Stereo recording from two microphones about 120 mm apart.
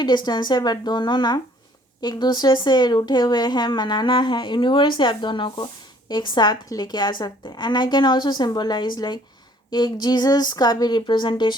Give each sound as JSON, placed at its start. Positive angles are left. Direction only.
{"t": 0.0, "sound": "speech", "side_deg": 35}